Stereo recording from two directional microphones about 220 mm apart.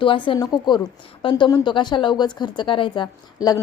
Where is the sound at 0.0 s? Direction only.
25° left (ahead or behind).